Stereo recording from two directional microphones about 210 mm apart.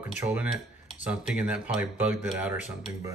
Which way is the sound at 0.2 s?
5° right (ahead or behind).